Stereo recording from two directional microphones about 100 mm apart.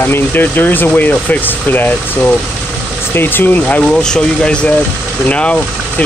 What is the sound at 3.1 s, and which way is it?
Speech, 20° left (ahead or behind).